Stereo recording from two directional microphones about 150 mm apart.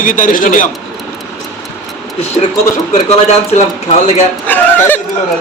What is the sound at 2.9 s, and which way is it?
Speech, 55° left (ahead or behind).